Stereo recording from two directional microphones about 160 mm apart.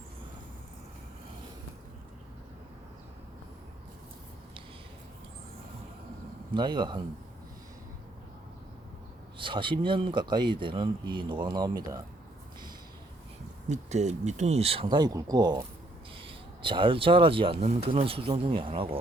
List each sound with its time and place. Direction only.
6.5 s speech: 30° right (ahead or behind)
9.4 s speech: 30° right (ahead or behind)
13.7 s speech: 45° right (ahead or behind)